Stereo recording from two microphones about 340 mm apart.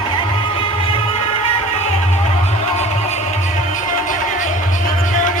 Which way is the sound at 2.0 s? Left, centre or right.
Centre.